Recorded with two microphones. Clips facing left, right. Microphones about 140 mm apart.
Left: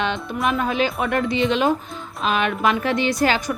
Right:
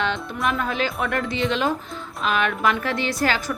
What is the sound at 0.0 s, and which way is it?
A woman's voice, 20° left (ahead or behind).